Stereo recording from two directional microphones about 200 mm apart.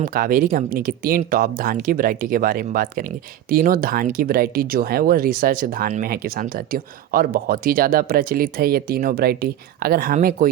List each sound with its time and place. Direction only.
0.0 s speech: 45° right (ahead or behind)